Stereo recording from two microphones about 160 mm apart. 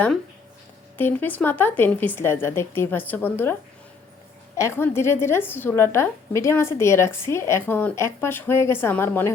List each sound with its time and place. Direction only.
0.9 s a woman's voice: 10° left (ahead or behind)